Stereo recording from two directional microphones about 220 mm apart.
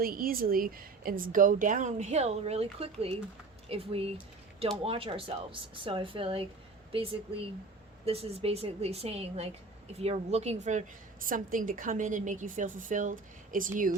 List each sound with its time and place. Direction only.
0.0 s a woman's voice: 40° right (ahead or behind)